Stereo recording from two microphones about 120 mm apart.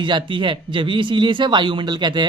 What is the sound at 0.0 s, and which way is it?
Speech, 40° right (ahead or behind).